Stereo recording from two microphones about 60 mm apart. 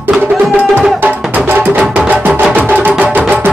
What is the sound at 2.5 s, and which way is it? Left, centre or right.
Music, right.